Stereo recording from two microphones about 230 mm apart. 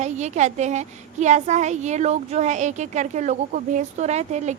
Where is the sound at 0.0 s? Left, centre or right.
Right.